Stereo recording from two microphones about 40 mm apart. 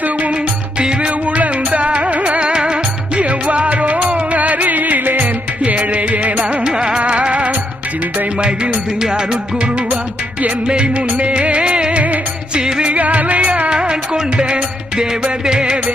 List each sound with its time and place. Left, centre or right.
0.0 s music: right
0.8 s music: right
2.5 s music: right
5.2 s music: right
11.2 s music of bollywood: right
12.5 s music: right
12.9 s music: right
13.7 s music: right